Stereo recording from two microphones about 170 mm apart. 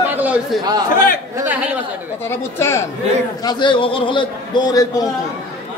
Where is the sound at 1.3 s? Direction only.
10° right (ahead or behind).